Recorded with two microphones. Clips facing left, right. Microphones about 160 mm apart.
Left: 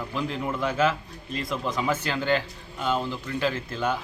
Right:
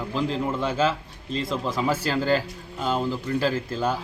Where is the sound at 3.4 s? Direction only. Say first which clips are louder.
Even; 35° right (ahead or behind).